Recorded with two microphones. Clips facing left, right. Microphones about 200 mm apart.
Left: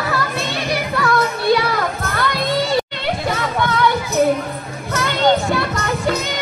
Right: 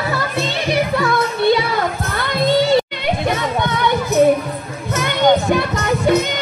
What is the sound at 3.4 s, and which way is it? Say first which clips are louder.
Music: even; 20° right (ahead or behind).